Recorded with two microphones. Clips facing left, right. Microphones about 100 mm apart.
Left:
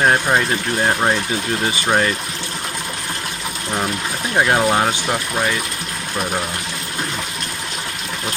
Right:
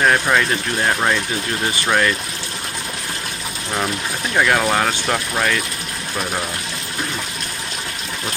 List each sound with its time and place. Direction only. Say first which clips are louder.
0.0 s speech: even; 30° left (ahead or behind)
4.4 s speech: left 1 dB; 25° left (ahead or behind)